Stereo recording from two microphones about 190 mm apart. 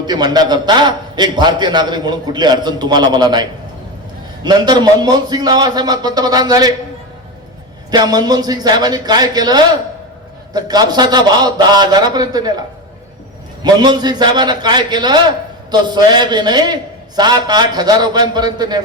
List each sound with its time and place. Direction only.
0.0 s a man's voice: 20° right (ahead or behind)
4.4 s a man's voice: 20° right (ahead or behind)
7.9 s a man's voice: 20° right (ahead or behind)